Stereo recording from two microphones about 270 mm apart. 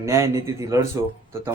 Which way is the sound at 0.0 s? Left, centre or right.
Centre.